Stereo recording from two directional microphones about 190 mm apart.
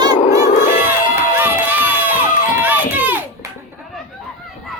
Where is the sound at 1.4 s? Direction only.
10° right (ahead or behind).